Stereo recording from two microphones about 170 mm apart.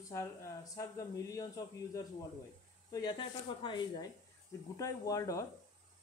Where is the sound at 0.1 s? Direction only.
15° left (ahead or behind).